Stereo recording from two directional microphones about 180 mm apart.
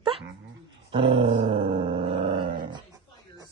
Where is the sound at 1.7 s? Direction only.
25° right (ahead or behind).